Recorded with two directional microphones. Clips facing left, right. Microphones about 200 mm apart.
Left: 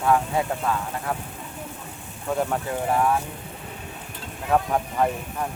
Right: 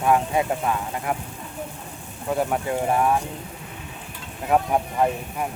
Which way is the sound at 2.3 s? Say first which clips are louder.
Right 1 dB; 5° right (ahead or behind).